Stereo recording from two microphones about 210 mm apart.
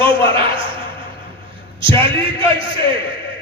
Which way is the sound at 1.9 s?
25° right (ahead or behind).